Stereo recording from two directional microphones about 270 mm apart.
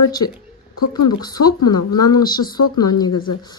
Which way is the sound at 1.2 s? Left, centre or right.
Centre.